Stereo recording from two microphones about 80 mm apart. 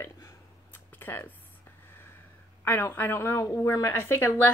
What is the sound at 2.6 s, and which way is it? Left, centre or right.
Speech, left.